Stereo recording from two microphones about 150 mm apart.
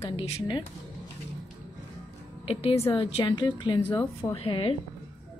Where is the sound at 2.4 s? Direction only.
40° left (ahead or behind).